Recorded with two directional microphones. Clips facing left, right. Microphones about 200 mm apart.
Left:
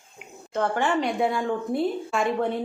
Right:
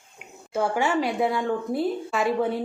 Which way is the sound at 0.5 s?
10° right (ahead or behind).